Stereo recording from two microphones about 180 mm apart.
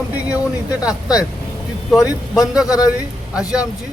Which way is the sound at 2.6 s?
20° left (ahead or behind).